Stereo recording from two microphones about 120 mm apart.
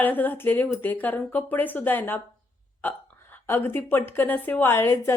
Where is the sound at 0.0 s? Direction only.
15° left (ahead or behind).